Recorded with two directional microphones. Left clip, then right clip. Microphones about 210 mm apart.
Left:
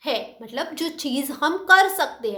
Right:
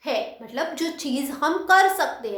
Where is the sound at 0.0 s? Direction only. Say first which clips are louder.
Even; 35° left (ahead or behind).